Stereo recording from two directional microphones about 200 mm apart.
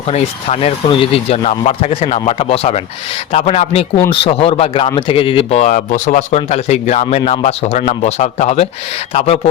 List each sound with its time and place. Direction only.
0.1 s speech: 30° left (ahead or behind)